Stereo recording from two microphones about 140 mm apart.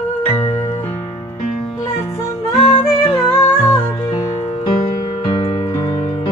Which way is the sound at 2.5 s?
45° left (ahead or behind).